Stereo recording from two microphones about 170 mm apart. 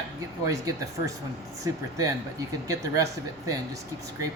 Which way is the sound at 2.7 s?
20° right (ahead or behind).